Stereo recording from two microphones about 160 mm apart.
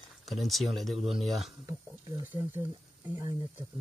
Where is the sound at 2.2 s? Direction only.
10° right (ahead or behind).